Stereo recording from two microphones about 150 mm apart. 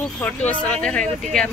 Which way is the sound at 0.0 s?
10° left (ahead or behind).